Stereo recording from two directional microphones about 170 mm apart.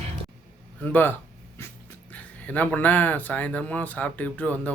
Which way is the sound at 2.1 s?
10° left (ahead or behind).